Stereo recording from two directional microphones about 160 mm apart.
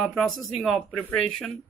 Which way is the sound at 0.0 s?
5° left (ahead or behind).